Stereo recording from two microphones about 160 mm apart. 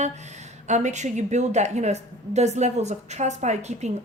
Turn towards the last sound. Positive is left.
turn(degrees=-45)  # may be behind; listen again after turning